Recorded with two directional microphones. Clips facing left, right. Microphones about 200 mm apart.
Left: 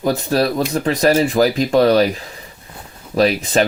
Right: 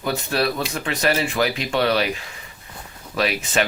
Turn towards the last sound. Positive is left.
turn(degrees=35)  # may be behind; listen again after turning